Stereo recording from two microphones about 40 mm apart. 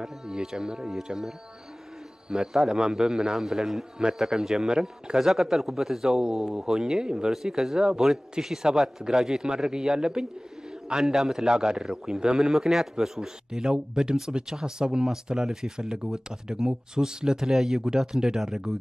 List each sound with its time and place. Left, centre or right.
0.0 s a man's voice: centre